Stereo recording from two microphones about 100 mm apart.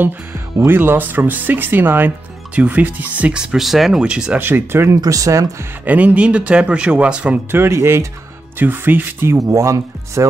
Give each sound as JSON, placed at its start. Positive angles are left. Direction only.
{"t": 0.7, "sound": "speech", "side_deg": -20}
{"t": 4.4, "sound": "speech", "side_deg": -20}
{"t": 5.9, "sound": "speech", "side_deg": -15}
{"t": 7.5, "sound": "speech", "side_deg": -25}
{"t": 9.4, "sound": "speech", "side_deg": -30}